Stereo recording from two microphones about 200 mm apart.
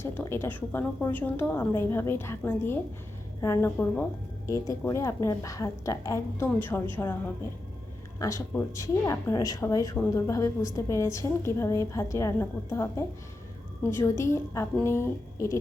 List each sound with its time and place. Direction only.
0.0 s a woman's voice: 10° left (ahead or behind)
8.2 s a woman's voice: 15° left (ahead or behind)